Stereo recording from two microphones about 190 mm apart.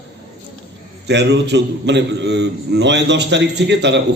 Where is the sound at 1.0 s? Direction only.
65° right (ahead or behind).